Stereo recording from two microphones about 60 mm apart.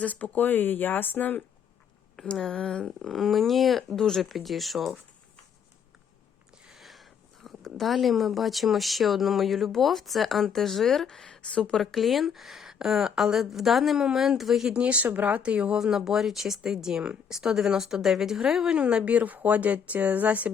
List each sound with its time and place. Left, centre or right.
0.0 s speech: left
2.2 s a woman's voice: centre
6.7 s speech: centre
11.8 s a woman's voice: centre
14.7 s a woman's voice: right